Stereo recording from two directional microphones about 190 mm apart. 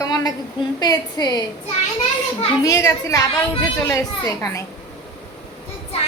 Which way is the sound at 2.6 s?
15° left (ahead or behind).